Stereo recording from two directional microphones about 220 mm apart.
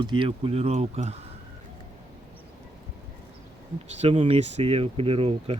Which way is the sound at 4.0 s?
25° right (ahead or behind).